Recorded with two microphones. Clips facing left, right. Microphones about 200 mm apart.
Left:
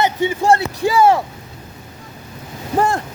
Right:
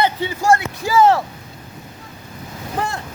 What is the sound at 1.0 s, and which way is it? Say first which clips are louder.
Speech: even; 10° left (ahead or behind).